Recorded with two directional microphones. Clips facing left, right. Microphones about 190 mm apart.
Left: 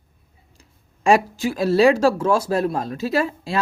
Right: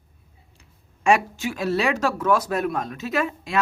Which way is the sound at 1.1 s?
35° left (ahead or behind).